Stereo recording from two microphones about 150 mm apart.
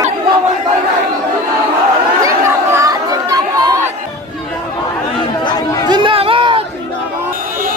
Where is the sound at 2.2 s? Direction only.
20° right (ahead or behind).